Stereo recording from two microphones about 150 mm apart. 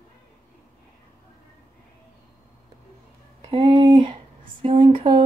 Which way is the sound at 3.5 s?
35° right (ahead or behind).